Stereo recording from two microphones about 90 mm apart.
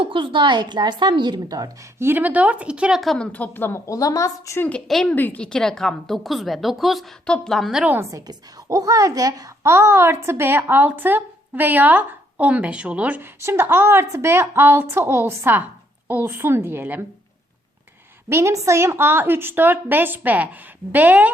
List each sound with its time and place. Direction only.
0.0 s a woman's voice: 70° right (ahead or behind); by 1.7 s 45° right (ahead or behind)
2.0 s speech: 25° right (ahead or behind)
3.0 s a woman's voice: centre (ahead or behind)
3.3 s a woman's voice: 20° left (ahead or behind)
3.8 s a woman's voice: 40° left (ahead or behind)
4.9 s a woman's voice: 5° left (ahead or behind)
5.1 s a woman's voice: 20° left (ahead or behind); by 7.9 s 5° right (ahead or behind)
8.1 s a child's voice: 45° right (ahead or behind); by 13.2 s 15° right (ahead or behind)
13.4 s a child's voice: 30° right (ahead or behind)
18.3 s a child's voice: 30° right (ahead or behind)